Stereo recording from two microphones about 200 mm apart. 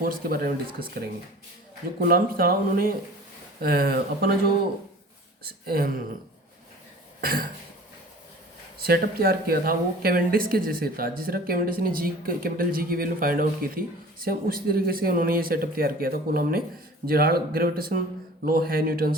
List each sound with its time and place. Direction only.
0.0 s speech: 45° right (ahead or behind)
2.0 s speech: 50° right (ahead or behind)
5.4 s speech: 50° right (ahead or behind)
7.2 s cough: 50° right (ahead or behind)
8.8 s speech: 50° right (ahead or behind)